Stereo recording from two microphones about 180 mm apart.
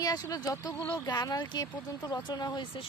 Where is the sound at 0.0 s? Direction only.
20° left (ahead or behind).